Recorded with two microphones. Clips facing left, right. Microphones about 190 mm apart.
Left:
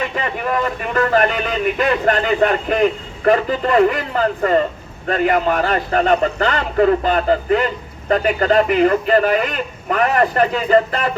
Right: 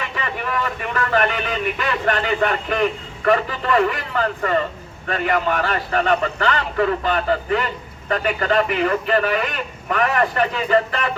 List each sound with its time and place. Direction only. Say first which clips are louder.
0.2 s a man's voice: left 3 dB; 40° left (ahead or behind)